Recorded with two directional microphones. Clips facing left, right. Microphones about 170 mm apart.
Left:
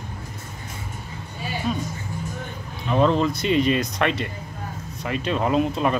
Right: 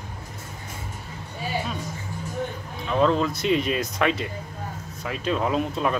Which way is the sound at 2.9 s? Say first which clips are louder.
Left 2 dB; centre (ahead or behind).